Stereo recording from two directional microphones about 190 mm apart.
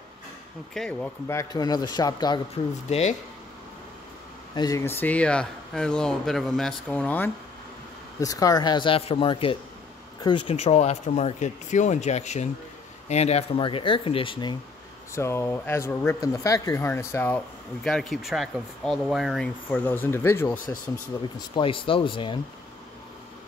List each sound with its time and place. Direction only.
0.7 s speech: 5° left (ahead or behind); by 2.4 s 20° left (ahead or behind)
2.5 s speech: 35° left (ahead or behind)
4.6 s speech: 15° left (ahead or behind)
8.2 s speech: 20° left (ahead or behind)
15.1 s speech: 15° left (ahead or behind)
17.8 s speech: centre (ahead or behind)
21.5 s speech: 25° left (ahead or behind)